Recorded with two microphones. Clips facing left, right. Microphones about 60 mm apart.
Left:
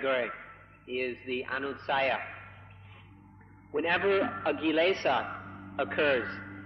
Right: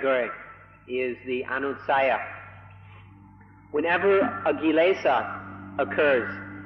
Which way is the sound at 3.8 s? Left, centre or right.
Centre.